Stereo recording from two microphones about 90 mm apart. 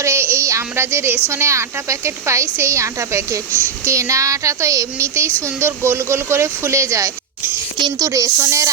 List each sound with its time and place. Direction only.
0.0 s a woman's voice: 30° right (ahead or behind)